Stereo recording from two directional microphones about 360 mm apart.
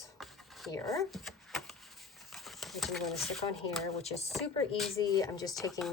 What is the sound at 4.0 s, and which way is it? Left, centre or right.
Speech, centre.